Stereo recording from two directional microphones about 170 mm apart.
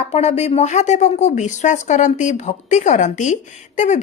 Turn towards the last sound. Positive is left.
turn(degrees=45)  # may be behind; listen again after turning